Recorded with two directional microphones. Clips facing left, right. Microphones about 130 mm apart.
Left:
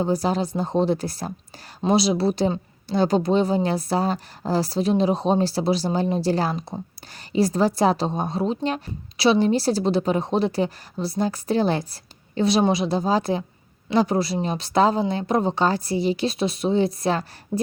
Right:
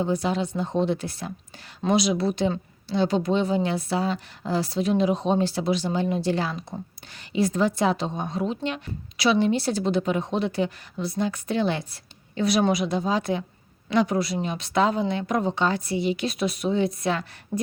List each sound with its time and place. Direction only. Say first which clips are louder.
0.0 s speech: left 2 dB; 35° left (ahead or behind)